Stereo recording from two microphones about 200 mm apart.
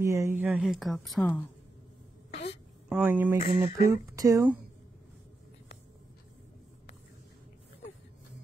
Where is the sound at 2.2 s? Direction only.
30° left (ahead or behind).